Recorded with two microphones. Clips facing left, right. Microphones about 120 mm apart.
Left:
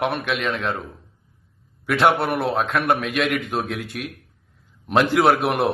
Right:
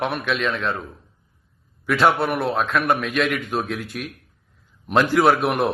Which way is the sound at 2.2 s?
25° left (ahead or behind).